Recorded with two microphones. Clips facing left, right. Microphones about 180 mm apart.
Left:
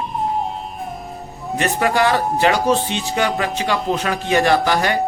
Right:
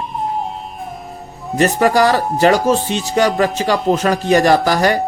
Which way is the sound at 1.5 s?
40° right (ahead or behind).